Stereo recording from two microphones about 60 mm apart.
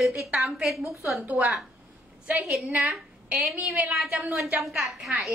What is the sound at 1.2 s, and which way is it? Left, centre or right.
Speech, right.